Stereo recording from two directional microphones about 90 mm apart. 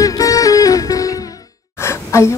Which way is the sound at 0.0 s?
40° left (ahead or behind).